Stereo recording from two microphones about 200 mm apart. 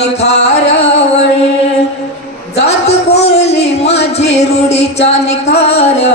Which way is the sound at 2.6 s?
30° left (ahead or behind).